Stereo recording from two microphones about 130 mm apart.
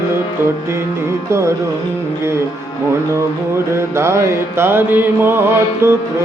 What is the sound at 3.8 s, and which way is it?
Music, 20° right (ahead or behind).